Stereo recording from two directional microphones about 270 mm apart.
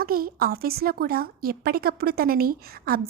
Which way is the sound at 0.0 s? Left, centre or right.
Right.